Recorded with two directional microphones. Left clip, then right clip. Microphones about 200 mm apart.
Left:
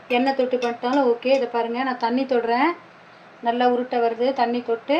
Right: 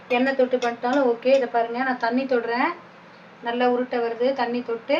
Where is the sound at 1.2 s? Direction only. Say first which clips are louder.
Right 1 dB; 25° left (ahead or behind).